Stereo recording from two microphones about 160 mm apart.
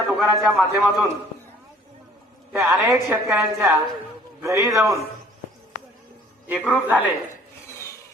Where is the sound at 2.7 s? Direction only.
Centre (ahead or behind).